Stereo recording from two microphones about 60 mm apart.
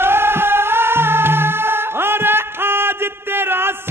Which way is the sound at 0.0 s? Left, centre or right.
Right.